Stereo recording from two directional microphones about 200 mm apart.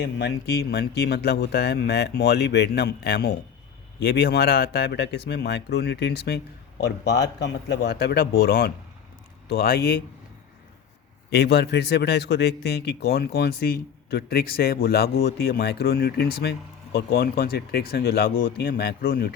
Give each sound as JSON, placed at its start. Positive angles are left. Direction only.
{"t": 0.0, "sound": "speech", "side_deg": 60}
{"t": 11.3, "sound": "speech", "side_deg": 55}